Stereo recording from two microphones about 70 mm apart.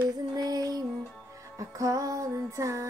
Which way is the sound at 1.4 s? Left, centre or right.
Right.